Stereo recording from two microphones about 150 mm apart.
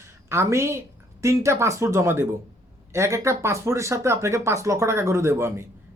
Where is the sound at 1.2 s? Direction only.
20° right (ahead or behind).